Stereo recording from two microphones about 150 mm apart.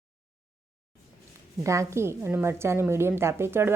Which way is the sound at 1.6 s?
20° right (ahead or behind).